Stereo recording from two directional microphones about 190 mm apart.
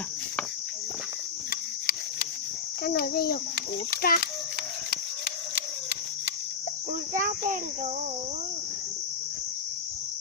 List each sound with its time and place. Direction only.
2.8 s a child's voice: 50° left (ahead or behind)
7.2 s a child's voice: 45° right (ahead or behind)